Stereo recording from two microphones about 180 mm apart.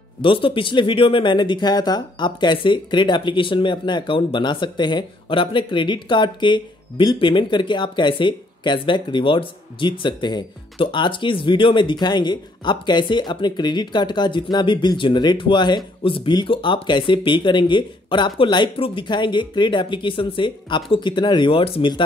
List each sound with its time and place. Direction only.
0.2 s speech: 30° left (ahead or behind)